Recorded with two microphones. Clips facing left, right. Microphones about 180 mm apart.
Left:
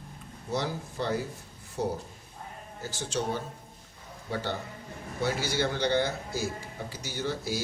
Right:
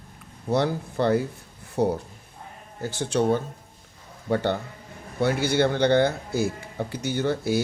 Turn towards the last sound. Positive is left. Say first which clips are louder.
# right 8 dB
turn(degrees=-60)  # may be behind; listen again after turning